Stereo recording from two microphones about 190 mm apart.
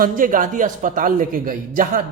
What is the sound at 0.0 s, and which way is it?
A man's voice, 45° right (ahead or behind).